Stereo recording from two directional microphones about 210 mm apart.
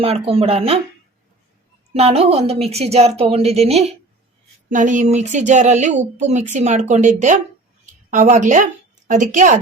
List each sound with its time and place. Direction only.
0.0 s speech: 25° right (ahead or behind)
1.9 s a woman's voice: 30° right (ahead or behind)